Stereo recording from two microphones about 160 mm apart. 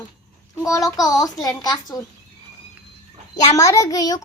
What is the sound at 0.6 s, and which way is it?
A child's voice, 20° left (ahead or behind).